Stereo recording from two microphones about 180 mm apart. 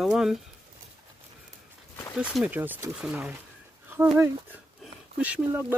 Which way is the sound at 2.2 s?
5° right (ahead or behind).